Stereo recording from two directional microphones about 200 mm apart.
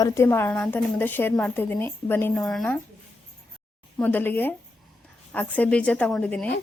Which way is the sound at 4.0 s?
10° left (ahead or behind).